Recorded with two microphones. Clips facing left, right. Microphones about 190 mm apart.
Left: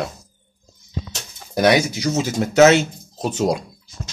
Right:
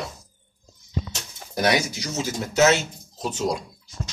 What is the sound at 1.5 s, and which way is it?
A man's voice, 70° left (ahead or behind).